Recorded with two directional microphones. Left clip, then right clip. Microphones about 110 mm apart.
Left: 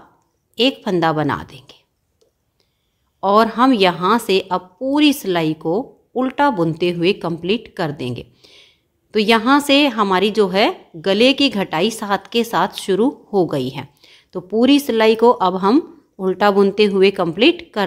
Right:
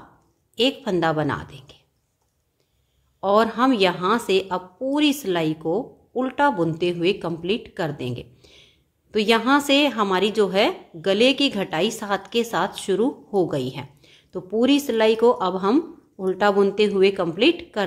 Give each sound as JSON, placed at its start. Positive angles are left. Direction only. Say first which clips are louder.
{"t": 0.6, "sound": "a woman's voice", "louder": "left 4 dB", "side_deg": 35}
{"t": 3.2, "sound": "a woman's voice", "louder": "left 5 dB", "side_deg": 40}